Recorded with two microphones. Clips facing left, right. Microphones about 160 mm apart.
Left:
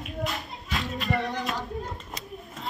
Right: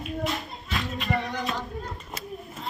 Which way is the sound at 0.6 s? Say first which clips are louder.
Left 1 dB; 20° left (ahead or behind).